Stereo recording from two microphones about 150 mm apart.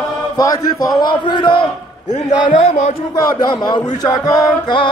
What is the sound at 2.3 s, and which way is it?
Speech, 40° left (ahead or behind).